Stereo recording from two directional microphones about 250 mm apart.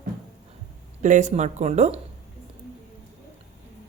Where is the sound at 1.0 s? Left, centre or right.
Right.